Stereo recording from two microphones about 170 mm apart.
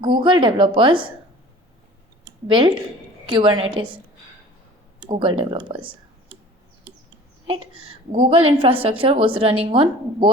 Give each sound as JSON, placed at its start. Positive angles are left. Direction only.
{"t": 0.0, "sound": "a woman's voice", "side_deg": -30}
{"t": 2.5, "sound": "a woman's voice", "side_deg": -30}
{"t": 5.0, "sound": "a woman's voice", "side_deg": -30}
{"t": 7.4, "sound": "a woman's voice", "side_deg": -30}